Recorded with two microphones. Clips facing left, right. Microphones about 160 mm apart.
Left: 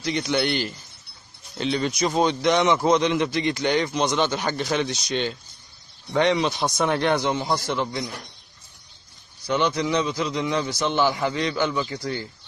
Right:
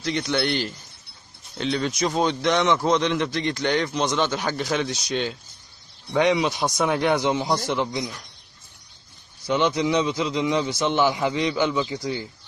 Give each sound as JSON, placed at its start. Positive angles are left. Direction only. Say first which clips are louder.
{"t": 0.0, "sound": "a man's voice", "louder": "left 1 dB", "side_deg": 5}
{"t": 9.5, "sound": "a man's voice", "louder": "right 1 dB", "side_deg": -20}